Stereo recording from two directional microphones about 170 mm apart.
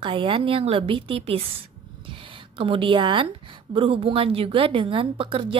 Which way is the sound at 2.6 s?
30° right (ahead or behind).